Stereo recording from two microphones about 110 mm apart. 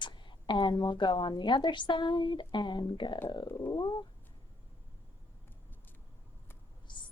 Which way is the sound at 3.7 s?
40° left (ahead or behind).